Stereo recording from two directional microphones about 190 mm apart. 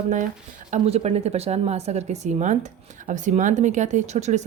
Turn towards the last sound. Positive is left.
turn(degrees=-35)  # may be behind; listen again after turning